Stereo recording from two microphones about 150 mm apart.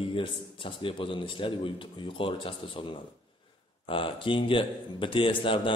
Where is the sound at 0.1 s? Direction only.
35° left (ahead or behind).